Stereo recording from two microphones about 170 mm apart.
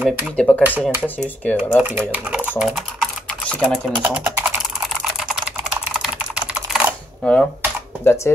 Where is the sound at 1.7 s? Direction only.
10° right (ahead or behind).